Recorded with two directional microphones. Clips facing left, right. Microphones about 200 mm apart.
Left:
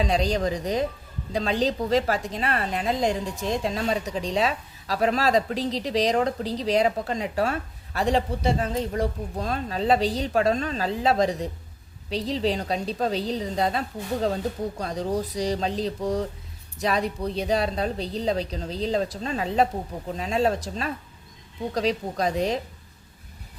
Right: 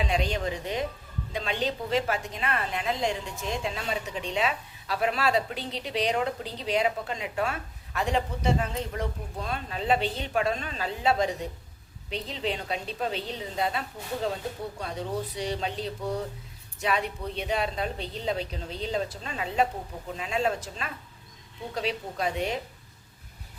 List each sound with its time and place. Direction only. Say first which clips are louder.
0.0 s a woman's voice: left 5 dB; 35° left (ahead or behind)